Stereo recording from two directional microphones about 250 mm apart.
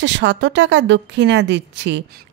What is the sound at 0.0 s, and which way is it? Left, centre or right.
A woman's voice, right.